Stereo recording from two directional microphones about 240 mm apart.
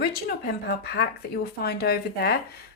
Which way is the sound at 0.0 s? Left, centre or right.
Left.